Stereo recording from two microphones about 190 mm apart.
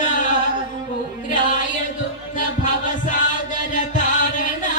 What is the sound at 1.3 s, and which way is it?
Chant, 40° left (ahead or behind).